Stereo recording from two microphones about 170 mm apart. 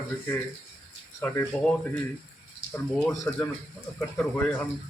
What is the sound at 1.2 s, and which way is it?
Speech, 10° left (ahead or behind).